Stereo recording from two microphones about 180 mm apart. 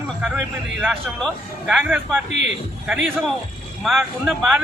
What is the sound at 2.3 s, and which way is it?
Speech, 80° right.